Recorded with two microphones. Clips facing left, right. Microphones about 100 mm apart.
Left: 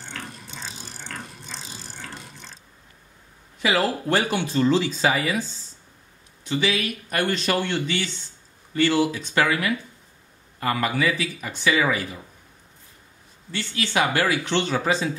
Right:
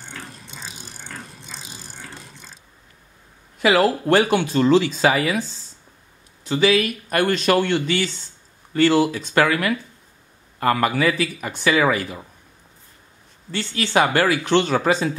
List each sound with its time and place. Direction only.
0.1 s ratchet: 10° right (ahead or behind)
3.6 s speech: 70° right (ahead or behind)
6.5 s speech: 50° right (ahead or behind)
13.5 s speech: 45° right (ahead or behind)